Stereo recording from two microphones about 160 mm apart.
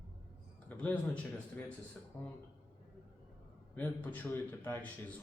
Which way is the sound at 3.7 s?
10° left (ahead or behind).